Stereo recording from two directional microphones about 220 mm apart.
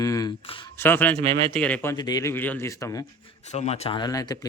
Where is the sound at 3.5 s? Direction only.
30° left (ahead or behind).